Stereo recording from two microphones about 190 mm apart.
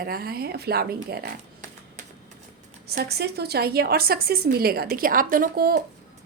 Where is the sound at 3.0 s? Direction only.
55° right (ahead or behind).